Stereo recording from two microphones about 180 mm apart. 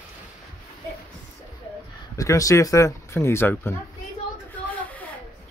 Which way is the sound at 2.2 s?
20° left (ahead or behind).